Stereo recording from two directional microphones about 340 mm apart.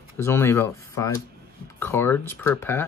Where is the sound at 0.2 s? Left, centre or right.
Centre.